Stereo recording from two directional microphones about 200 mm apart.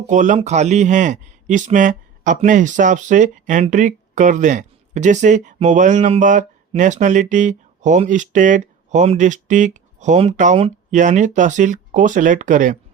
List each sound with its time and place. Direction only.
0.1 s speech: 40° right (ahead or behind)